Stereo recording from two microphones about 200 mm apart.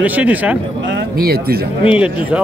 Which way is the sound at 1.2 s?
50° right (ahead or behind).